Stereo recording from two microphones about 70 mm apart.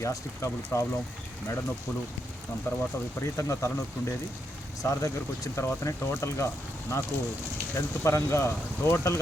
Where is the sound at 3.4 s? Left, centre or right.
Left.